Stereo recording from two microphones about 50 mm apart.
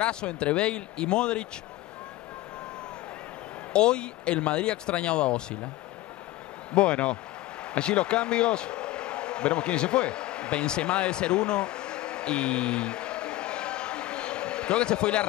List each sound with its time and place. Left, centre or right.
0.0 s speech: left
3.7 s speech: centre
6.7 s speech: left
7.7 s a sound: left